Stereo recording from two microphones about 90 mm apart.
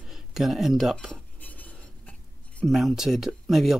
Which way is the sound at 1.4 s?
20° left (ahead or behind).